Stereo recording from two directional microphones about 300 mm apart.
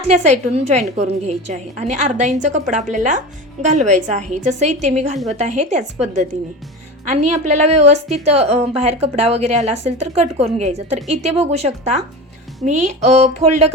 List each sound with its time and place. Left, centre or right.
0.1 s a woman's voice: right